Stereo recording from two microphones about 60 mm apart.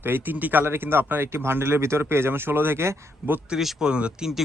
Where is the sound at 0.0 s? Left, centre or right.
Right.